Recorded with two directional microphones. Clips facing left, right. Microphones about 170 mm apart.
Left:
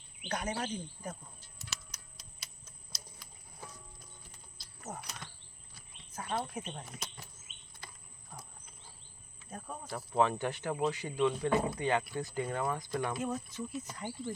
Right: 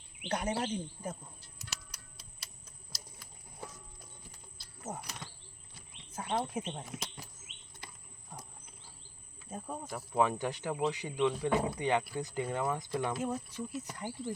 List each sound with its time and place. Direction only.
0.3 s speech: 25° right (ahead or behind)
2.4 s typewriter: 5° right (ahead or behind)
4.8 s speech: 15° right (ahead or behind)
9.5 s speech: 20° right (ahead or behind)